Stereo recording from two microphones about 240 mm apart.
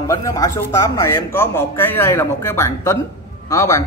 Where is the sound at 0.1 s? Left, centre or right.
Centre.